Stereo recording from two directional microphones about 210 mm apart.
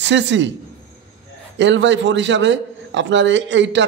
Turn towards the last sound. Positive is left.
turn(degrees=-60)  # may be behind; listen again after turning